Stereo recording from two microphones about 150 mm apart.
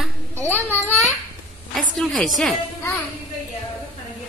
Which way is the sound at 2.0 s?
Centre (ahead or behind).